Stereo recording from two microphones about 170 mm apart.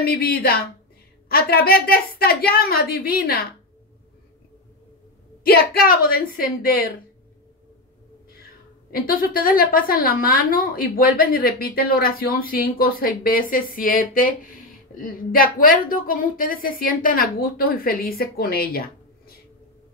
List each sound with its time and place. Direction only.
0.0 s a woman's voice: 65° left (ahead or behind)
5.4 s a woman's voice: 65° left (ahead or behind)
8.9 s a woman's voice: 60° left (ahead or behind)